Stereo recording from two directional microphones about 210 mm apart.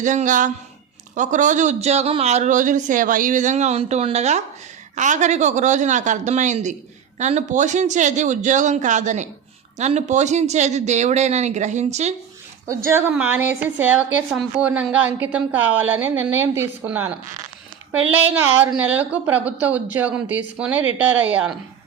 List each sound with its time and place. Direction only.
0.0 s a man's voice: 35° right (ahead or behind)
12.6 s a woman's voice: 10° right (ahead or behind)